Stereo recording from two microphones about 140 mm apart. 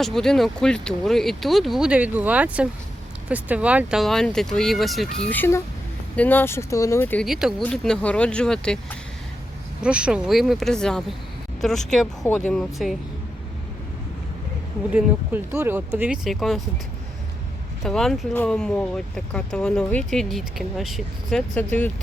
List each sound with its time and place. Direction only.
0.0 s speech: 5° left (ahead or behind)
7.3 s speech: 5° right (ahead or behind)
7.6 s speech: 5° left (ahead or behind)
9.8 s speech: 5° right (ahead or behind)
14.9 s speech: 15° right (ahead or behind)
17.8 s speech: 5° left (ahead or behind)